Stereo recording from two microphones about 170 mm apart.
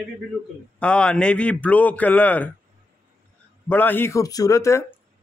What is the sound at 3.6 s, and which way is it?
A man's voice, 10° left (ahead or behind).